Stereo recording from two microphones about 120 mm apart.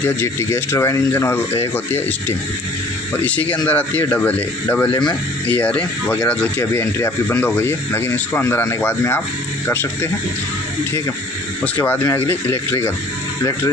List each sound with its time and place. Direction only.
0.0 s speech: 20° left (ahead or behind)
3.2 s speech: 10° left (ahead or behind)
11.8 s speech: 20° left (ahead or behind)